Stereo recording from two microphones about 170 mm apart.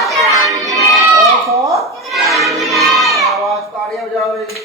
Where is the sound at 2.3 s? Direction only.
Centre (ahead or behind).